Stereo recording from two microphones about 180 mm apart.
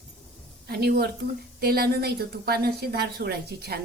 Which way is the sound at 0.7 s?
60° right (ahead or behind).